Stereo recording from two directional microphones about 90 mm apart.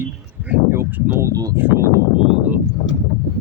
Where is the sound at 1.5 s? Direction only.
25° right (ahead or behind).